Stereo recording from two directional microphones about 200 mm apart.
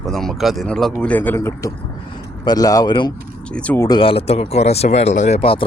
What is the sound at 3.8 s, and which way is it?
Speech, 20° left (ahead or behind).